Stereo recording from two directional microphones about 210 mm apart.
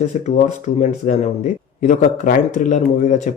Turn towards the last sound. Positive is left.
turn(degrees=35)  # may be behind; listen again after turning